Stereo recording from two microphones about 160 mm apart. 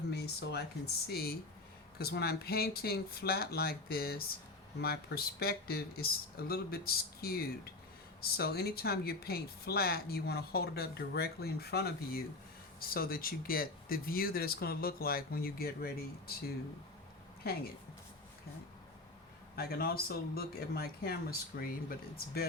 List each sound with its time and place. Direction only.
0.1 s a sound: 90° left
1.0 s speech: 75° left (ahead or behind)
12.8 s speech: 70° left (ahead or behind)
17.5 s speech: 75° left (ahead or behind)
19.5 s speech: 70° left (ahead or behind)